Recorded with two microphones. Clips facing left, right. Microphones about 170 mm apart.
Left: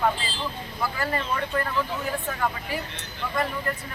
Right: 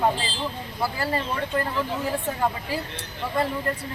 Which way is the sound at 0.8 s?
30° right (ahead or behind).